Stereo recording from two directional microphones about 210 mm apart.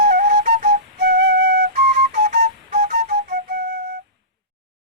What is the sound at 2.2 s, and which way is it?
Flute, 40° right (ahead or behind).